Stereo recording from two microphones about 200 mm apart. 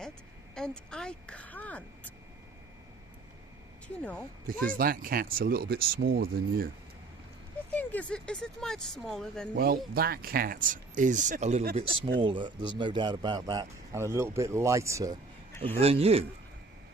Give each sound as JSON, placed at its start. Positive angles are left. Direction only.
{"t": 0.5, "sound": "speech", "side_deg": 5}
{"t": 4.0, "sound": "speech", "side_deg": 10}
{"t": 4.4, "sound": "speech", "side_deg": -45}
{"t": 7.8, "sound": "speech", "side_deg": 5}
{"t": 9.6, "sound": "speech", "side_deg": -50}
{"t": 12.2, "sound": "speech", "side_deg": -25}
{"t": 15.6, "sound": "speech", "side_deg": -30}